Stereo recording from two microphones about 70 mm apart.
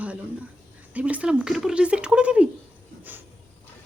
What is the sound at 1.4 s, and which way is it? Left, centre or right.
Speech, centre.